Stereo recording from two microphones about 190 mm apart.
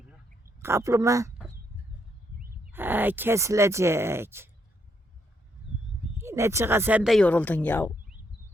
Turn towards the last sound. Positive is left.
turn(degrees=10)  # may be behind; listen again after turning